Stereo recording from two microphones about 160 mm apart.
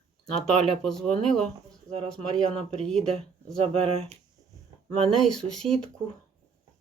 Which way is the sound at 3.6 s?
35° right (ahead or behind).